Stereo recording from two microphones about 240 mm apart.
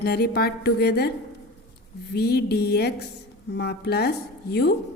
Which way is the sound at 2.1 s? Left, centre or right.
Left.